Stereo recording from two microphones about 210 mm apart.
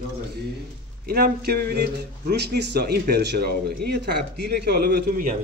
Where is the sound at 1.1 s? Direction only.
45° right (ahead or behind).